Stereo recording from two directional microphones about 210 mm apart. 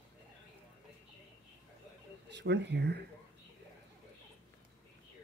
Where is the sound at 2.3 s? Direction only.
55° right (ahead or behind).